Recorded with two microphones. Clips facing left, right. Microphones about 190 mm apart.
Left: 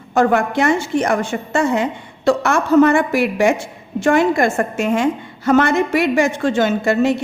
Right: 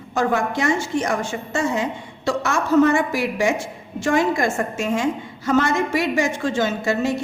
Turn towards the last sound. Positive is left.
turn(degrees=60)  # may be behind; listen again after turning